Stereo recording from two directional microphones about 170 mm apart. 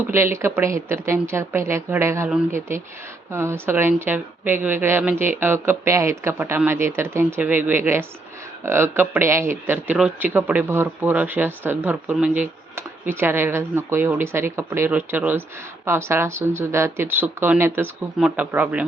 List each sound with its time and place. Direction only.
0.0 s speech: 15° right (ahead or behind)